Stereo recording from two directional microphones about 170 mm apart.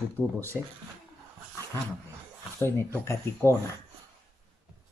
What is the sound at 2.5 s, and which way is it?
Speech, 15° left (ahead or behind).